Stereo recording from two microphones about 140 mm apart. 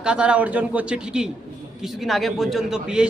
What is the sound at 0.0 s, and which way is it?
A man's voice, 5° right (ahead or behind).